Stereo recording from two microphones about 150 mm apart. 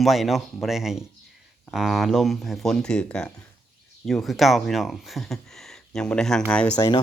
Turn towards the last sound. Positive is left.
turn(degrees=25)  # may be behind; listen again after turning